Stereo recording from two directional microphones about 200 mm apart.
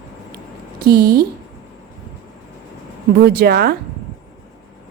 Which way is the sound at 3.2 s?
50° right (ahead or behind).